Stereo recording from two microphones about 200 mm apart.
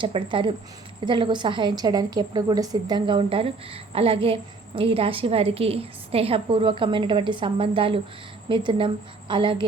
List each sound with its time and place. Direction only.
0.0 s a woman's voice: 25° right (ahead or behind)